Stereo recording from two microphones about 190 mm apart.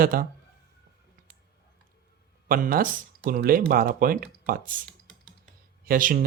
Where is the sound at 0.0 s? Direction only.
50° right (ahead or behind).